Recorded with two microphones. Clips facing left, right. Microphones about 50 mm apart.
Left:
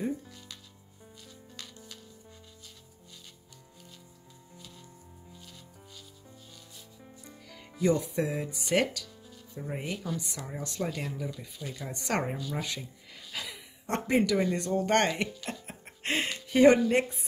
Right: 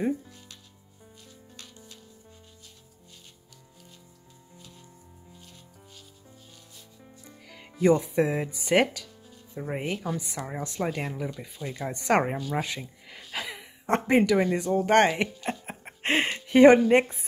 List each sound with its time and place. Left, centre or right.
7.8 s speech: right
8.6 s music: right
9.6 s speech: right
12.4 s a sound: right
13.8 s speech: right
14.4 s speech: centre
15.4 s music: right